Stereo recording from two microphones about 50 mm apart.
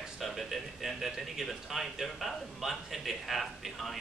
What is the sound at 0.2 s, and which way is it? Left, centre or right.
Speech, centre.